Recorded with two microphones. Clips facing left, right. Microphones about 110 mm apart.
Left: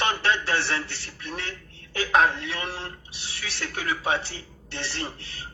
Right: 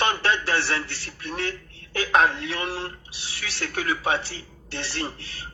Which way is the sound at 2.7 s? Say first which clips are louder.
Right 4 dB; 25° left (ahead or behind).